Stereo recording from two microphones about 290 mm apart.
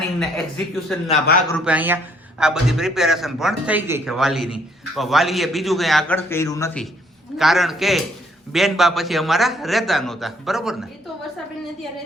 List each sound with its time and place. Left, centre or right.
0.2 s speech: centre
7.3 s speech: centre